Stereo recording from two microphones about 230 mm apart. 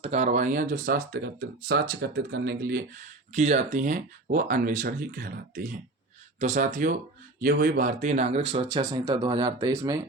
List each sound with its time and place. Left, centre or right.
0.0 s speech: right
3.3 s speech: right; by 10.0 s centre